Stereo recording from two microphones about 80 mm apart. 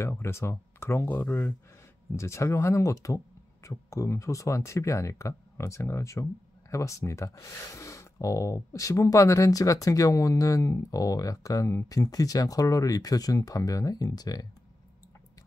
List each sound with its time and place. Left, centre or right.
0.0 s speech: left
2.1 s speech: left